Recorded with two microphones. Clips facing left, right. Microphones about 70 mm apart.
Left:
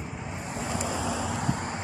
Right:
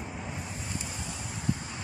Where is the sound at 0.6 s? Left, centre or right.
Left.